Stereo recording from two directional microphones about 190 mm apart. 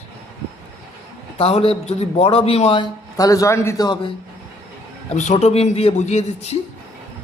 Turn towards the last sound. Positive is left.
turn(degrees=35)  # may be behind; listen again after turning